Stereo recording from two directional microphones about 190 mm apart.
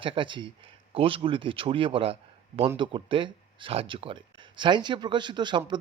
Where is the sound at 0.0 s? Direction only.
25° right (ahead or behind).